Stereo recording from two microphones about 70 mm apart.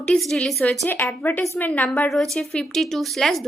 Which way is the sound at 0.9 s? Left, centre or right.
Left.